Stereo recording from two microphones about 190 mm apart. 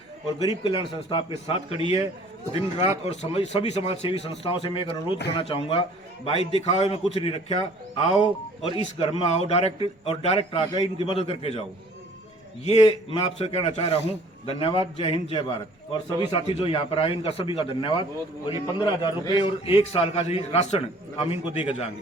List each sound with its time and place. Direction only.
0.4 s a man's voice: 25° left (ahead or behind)
10.7 s a man's voice: 20° left (ahead or behind)
12.6 s a man's voice: 30° left (ahead or behind)